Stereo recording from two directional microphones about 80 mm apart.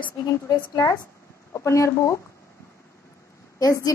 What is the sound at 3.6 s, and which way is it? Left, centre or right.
Speech, left.